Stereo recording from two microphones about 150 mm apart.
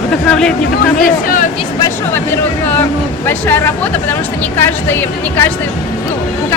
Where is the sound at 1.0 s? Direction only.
65° left (ahead or behind).